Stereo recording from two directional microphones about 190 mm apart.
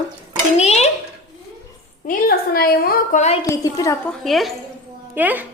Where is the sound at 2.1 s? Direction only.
50° left (ahead or behind).